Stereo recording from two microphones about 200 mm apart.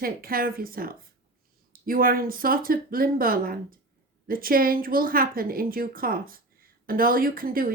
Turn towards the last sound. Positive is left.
turn(degrees=-45)  # may be behind; listen again after turning